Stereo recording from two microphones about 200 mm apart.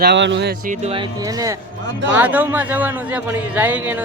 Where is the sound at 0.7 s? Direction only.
30° right (ahead or behind).